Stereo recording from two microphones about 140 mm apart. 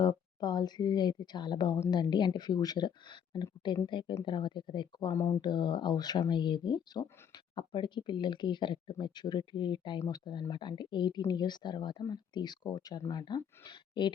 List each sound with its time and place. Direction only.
0.0 s a woman's voice: 30° left (ahead or behind)
5.4 s a woman's voice: 30° left (ahead or behind)